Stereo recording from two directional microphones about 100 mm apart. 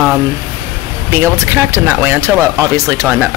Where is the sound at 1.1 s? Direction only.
25° right (ahead or behind).